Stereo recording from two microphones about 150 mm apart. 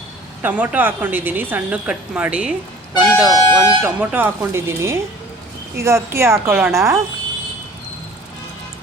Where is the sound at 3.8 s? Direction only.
10° right (ahead or behind).